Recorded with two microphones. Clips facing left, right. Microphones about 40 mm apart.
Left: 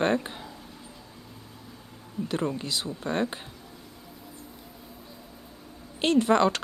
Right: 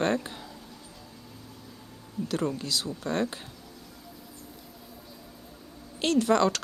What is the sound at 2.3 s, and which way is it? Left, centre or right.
Speech, left.